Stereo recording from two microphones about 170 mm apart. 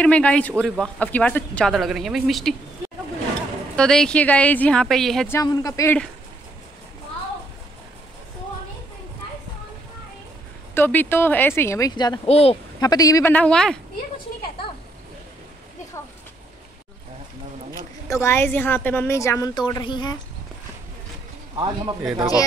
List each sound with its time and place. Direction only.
0.0 s speech: 5° left (ahead or behind)
3.7 s speech: 5° left (ahead or behind)
5.3 s speech: 20° left (ahead or behind)
10.7 s a woman's voice: 10° left (ahead or behind)
12.3 s a woman's voice: 35° left (ahead or behind)
12.8 s speech: 20° left (ahead or behind)
13.3 s speech: 5° left (ahead or behind)
18.1 s a woman's voice: 15° left (ahead or behind)
21.5 s speech: 25° right (ahead or behind)